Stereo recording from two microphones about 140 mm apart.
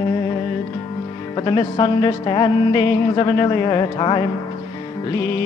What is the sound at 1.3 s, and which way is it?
Music, 35° left (ahead or behind).